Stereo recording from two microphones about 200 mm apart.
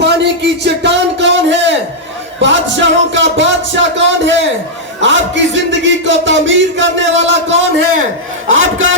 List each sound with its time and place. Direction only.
0.0 s a sound: 60° right (ahead or behind)
2.4 s a man's voice: 65° right (ahead or behind)
8.4 s a man's voice: 75° right (ahead or behind)